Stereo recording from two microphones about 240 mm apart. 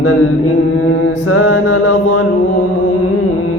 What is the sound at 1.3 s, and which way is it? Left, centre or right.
Mantra, left.